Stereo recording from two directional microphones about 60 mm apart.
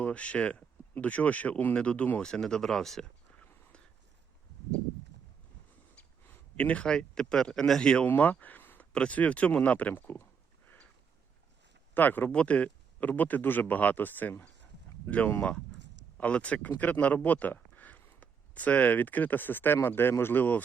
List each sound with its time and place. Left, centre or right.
0.0 s speech: left
2.3 s speech: centre
6.6 s speech: left
8.0 s speech: left
8.9 s speech: centre
9.9 s speech: left
11.9 s speech: left
15.4 s speech: centre
17.2 s a sound: left
18.2 s speech: left